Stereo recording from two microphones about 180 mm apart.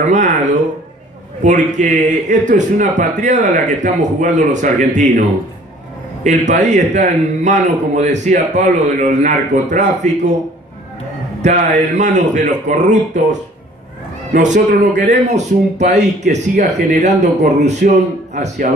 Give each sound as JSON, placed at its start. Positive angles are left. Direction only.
{"t": 0.0, "sound": "a sound", "side_deg": -40}
{"t": 1.4, "sound": "a man's voice", "side_deg": -45}
{"t": 6.2, "sound": "a man's voice", "side_deg": -40}
{"t": 11.4, "sound": "a man's voice", "side_deg": -40}